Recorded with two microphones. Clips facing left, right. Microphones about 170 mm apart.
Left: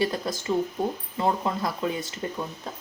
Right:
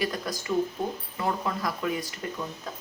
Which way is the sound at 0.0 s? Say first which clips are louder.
Left 4 dB; 25° left (ahead or behind).